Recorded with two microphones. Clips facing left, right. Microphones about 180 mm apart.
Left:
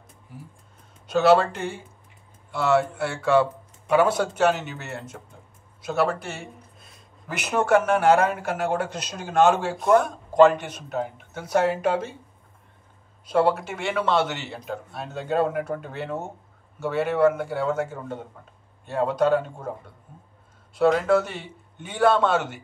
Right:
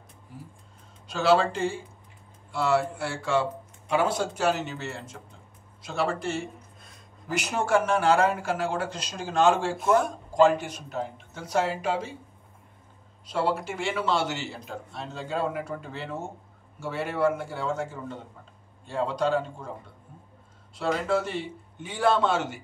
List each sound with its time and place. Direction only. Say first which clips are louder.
1.1 s speech: left 4 dB; 65° left (ahead or behind)
13.3 s speech: left 6 dB; 55° left (ahead or behind)
18.9 s speech: left 5 dB; 55° left (ahead or behind)
20.8 s speech: left 7 dB; 60° left (ahead or behind)